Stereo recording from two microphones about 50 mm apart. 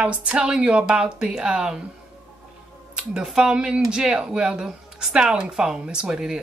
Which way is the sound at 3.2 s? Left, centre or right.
Centre.